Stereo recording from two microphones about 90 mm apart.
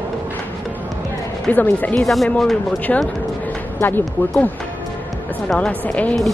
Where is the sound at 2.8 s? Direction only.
15° left (ahead or behind).